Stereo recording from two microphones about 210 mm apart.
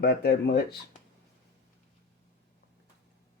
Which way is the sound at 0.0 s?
50° left (ahead or behind).